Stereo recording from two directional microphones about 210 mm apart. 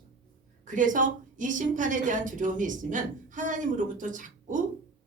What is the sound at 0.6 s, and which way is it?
A woman's voice, 35° right (ahead or behind).